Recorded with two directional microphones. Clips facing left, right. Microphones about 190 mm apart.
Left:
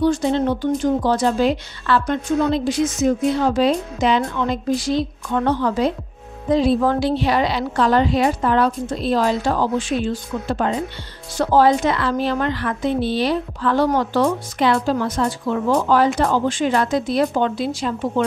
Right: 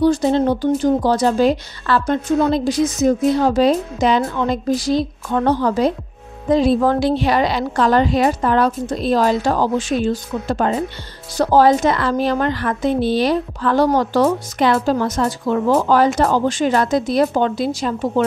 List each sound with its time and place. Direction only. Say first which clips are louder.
0.0 s a woman's voice: right 3 dB; 40° right (ahead or behind)